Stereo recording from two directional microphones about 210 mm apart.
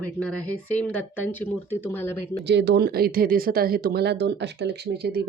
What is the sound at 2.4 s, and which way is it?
Speech, 55° right (ahead or behind).